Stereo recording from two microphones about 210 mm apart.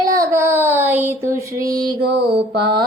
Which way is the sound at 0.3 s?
10° right (ahead or behind).